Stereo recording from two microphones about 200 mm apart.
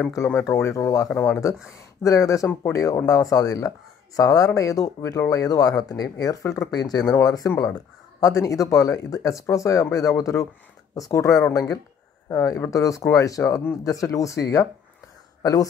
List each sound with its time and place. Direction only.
0.0 s speech: 10° left (ahead or behind)